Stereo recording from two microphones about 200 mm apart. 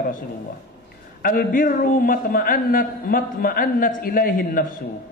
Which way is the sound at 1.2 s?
45° left (ahead or behind).